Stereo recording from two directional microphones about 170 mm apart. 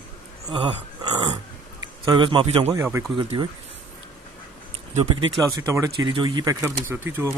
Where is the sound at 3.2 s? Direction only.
30° right (ahead or behind).